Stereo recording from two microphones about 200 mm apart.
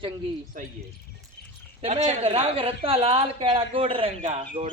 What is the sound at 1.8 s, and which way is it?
A woman's voice, 30° right (ahead or behind).